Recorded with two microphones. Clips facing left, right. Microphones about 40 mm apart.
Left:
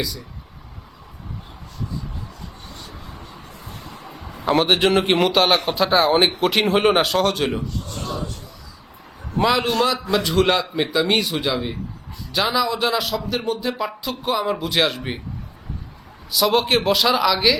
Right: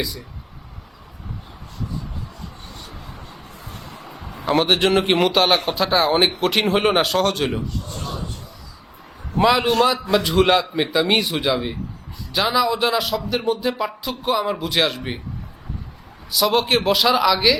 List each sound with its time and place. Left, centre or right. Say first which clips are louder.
4.0 s a man's voice: left 2 dB; centre
9.4 s a man's voice: right 2 dB; centre
11.2 s speech: even; centre
11.4 s a man's voice: right 2 dB; centre
16.3 s a man's voice: even; centre